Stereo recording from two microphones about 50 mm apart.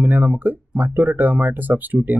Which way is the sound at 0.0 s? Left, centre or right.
Right.